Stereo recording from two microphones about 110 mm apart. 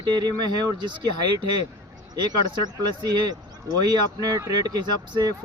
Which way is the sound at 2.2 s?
40° right (ahead or behind).